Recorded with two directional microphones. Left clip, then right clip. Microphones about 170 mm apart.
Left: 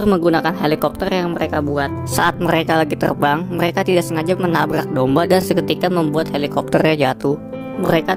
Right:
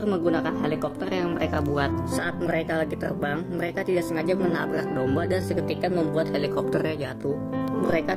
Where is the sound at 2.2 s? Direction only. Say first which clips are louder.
Left 13 dB; 45° left (ahead or behind).